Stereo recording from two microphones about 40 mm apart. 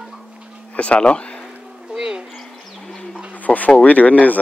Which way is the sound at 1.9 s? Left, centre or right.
Centre.